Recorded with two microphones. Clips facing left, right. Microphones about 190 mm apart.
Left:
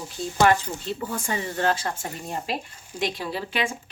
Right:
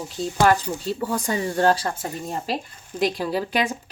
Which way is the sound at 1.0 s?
35° right (ahead or behind).